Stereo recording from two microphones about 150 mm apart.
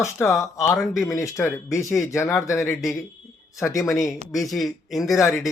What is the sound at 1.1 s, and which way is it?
Speech, 20° left (ahead or behind).